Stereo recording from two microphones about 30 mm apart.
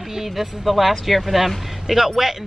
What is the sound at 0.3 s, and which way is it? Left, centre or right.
Speech, centre.